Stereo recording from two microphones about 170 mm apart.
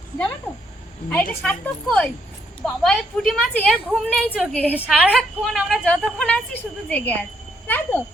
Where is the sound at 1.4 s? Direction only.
5° left (ahead or behind).